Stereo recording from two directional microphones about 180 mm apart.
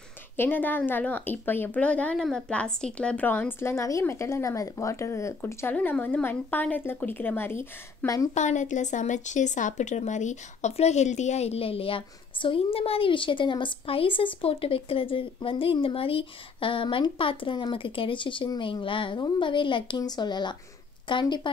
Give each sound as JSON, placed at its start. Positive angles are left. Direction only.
{"t": 0.4, "sound": "speech", "side_deg": 10}
{"t": 8.4, "sound": "a woman's voice", "side_deg": 40}